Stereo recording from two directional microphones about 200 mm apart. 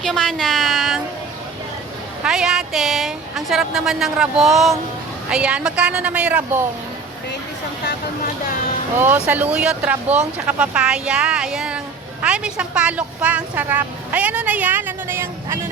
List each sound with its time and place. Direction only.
0.0 s a sound: centre (ahead or behind)
2.2 s a woman's voice: 5° right (ahead or behind)
9.0 s speech: 10° right (ahead or behind)